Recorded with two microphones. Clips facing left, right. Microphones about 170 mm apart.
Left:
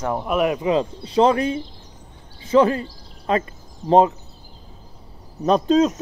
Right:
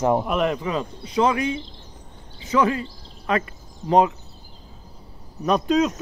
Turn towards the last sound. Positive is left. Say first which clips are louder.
# left 3 dB
turn(degrees=30)  # may be behind; listen again after turning